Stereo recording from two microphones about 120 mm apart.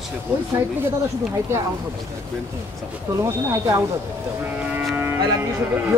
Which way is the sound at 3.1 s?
25° right (ahead or behind).